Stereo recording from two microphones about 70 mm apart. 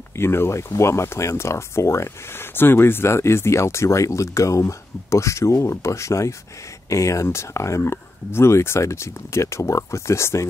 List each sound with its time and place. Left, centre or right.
0.1 s speech: left